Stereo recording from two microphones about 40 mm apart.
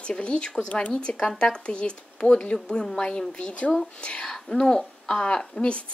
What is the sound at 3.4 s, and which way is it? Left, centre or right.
Speech, left.